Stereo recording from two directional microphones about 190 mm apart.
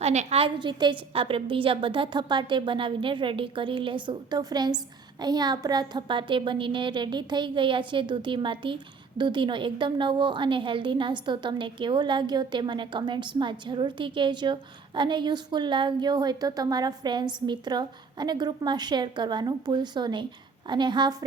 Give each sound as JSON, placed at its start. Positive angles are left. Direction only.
{"t": 0.0, "sound": "a woman's voice", "side_deg": -35}